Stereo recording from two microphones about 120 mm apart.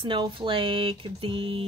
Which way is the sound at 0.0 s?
45° right (ahead or behind).